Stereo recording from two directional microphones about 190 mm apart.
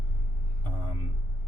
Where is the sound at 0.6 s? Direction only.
25° right (ahead or behind).